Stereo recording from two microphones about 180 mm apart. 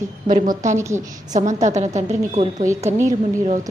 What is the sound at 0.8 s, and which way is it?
Speech, 15° right (ahead or behind).